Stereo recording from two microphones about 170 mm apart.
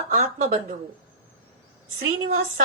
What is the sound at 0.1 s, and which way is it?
Speech, 55° right (ahead or behind).